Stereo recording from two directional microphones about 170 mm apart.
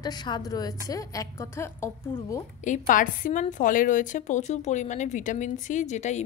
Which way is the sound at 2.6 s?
50° left (ahead or behind).